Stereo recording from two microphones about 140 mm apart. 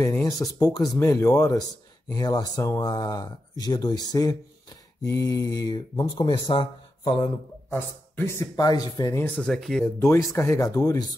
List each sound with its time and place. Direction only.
0.0 s speech: 20° left (ahead or behind)
7.7 s speech: 15° left (ahead or behind)
9.2 s speech: 10° left (ahead or behind)
9.9 s speech: 20° left (ahead or behind)